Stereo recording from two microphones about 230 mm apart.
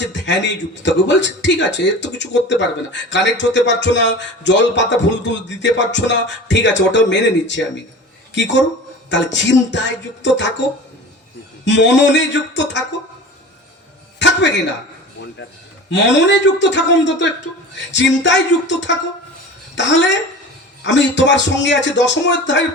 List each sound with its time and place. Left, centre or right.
0.0 s speech: left
11.6 s speech: left
14.2 s a sound: left
15.9 s speech: left